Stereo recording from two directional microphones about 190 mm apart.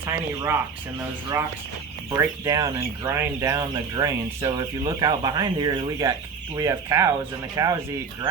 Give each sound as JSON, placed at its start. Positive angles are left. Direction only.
{"t": 0.0, "sound": "speech", "side_deg": -15}
{"t": 2.0, "sound": "speech", "side_deg": -15}